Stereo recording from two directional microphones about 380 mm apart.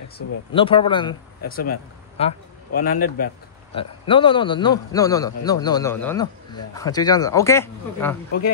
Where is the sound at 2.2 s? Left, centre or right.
Centre.